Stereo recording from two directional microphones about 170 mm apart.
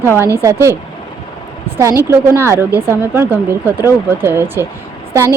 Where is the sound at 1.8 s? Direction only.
15° right (ahead or behind).